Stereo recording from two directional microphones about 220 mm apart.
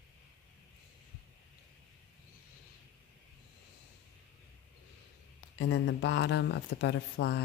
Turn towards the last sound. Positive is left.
turn(degrees=50)  # may be behind; listen again after turning